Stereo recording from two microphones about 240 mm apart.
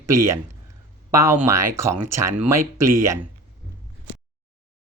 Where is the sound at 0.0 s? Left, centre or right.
Right.